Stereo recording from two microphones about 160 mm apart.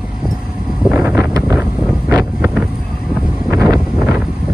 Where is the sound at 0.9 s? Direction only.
5° right (ahead or behind).